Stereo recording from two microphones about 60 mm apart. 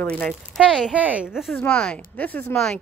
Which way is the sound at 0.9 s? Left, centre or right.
Right.